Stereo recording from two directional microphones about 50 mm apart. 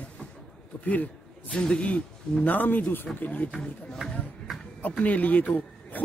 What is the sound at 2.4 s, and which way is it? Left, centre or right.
Speech, left.